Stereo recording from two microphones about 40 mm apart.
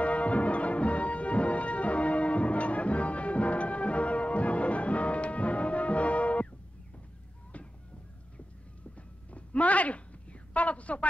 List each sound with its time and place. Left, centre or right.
0.0 s music: left
7.5 s music: left
8.9 s a sound: left